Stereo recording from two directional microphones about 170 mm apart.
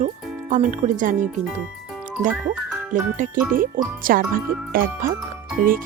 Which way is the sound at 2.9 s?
55° right (ahead or behind).